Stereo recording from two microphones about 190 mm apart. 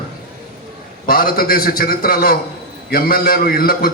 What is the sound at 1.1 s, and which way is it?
A man's voice, 50° left (ahead or behind).